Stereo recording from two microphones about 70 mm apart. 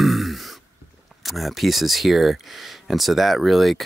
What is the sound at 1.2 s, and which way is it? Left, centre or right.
Speech, centre.